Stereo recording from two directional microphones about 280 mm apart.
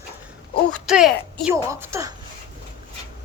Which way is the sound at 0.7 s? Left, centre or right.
Centre.